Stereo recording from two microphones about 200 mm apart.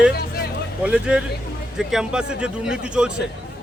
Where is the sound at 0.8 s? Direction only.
5° right (ahead or behind).